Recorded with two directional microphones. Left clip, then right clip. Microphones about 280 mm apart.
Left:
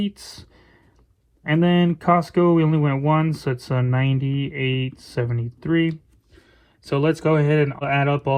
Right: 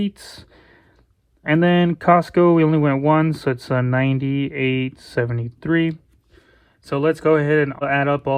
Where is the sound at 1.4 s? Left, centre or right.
Right.